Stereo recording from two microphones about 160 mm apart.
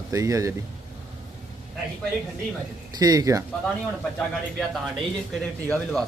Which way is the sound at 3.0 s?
25° right (ahead or behind).